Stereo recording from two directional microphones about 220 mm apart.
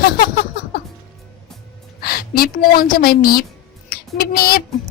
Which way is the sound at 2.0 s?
45° left (ahead or behind).